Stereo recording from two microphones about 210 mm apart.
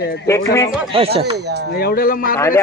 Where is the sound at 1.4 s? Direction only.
55° right (ahead or behind).